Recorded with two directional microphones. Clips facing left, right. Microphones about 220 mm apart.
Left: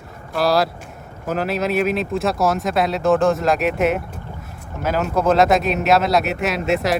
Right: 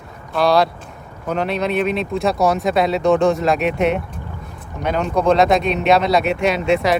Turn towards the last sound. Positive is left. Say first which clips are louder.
# right 3 dB
turn(degrees=0)  # may be behind; listen again after turning